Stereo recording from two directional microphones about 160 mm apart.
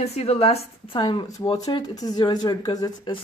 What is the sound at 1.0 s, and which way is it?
Speech, 30° left (ahead or behind).